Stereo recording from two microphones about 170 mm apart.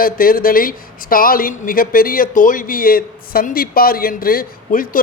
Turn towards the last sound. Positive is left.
turn(degrees=55)  # may be behind; listen again after turning